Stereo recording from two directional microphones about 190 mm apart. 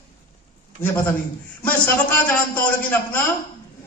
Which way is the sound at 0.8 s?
10° left (ahead or behind).